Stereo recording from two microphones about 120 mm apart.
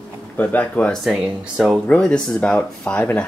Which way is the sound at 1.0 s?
Centre (ahead or behind).